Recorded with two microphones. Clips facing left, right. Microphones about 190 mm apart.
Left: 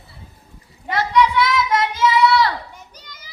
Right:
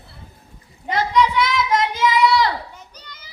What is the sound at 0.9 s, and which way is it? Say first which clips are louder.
Child singing: left 1 dB; 20° right (ahead or behind).